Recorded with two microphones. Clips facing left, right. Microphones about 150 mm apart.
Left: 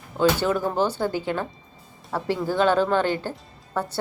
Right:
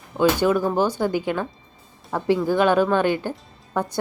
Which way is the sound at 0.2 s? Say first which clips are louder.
Right 3 dB; 15° right (ahead or behind).